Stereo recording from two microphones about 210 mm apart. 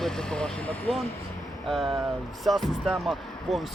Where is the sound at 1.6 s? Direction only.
Centre (ahead or behind).